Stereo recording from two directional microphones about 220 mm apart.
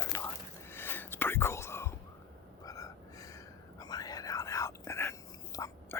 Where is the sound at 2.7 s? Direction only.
15° left (ahead or behind).